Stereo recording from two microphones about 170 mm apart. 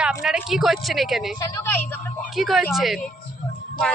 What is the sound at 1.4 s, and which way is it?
Speech, 20° left (ahead or behind).